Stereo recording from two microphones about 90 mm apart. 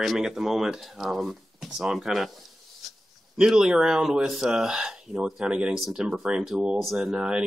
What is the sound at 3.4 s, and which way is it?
Speech, 5° right (ahead or behind).